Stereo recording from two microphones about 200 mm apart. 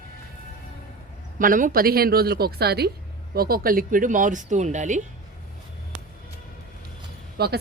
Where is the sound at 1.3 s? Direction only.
40° right (ahead or behind).